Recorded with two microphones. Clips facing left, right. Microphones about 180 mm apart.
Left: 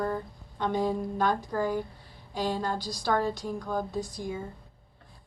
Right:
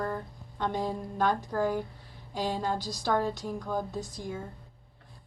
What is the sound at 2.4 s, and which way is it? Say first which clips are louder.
Speech: left 1 dB; 15° right (ahead or behind).